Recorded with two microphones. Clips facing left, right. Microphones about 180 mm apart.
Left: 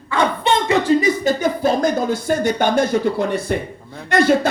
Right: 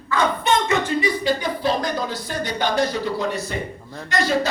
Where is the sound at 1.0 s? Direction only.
45° left (ahead or behind).